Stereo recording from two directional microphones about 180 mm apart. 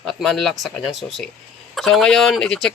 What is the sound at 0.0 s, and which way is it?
Speech, centre (ahead or behind).